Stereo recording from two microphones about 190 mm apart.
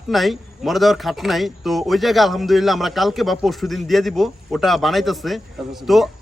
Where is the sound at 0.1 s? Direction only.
Centre (ahead or behind).